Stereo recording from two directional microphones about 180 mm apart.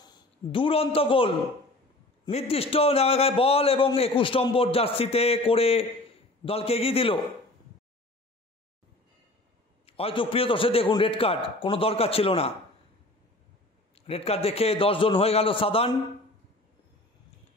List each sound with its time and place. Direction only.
0.0 s a man's voice: 25° left (ahead or behind)
2.3 s a man's voice: 35° left (ahead or behind)
9.8 s a man's voice: 30° left (ahead or behind)
13.9 s a man's voice: 35° left (ahead or behind)